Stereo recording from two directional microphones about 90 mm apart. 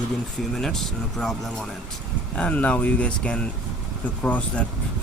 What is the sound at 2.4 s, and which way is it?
Speech, 15° left (ahead or behind).